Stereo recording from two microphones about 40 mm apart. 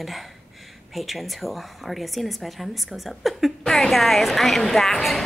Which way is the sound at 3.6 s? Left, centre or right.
Centre.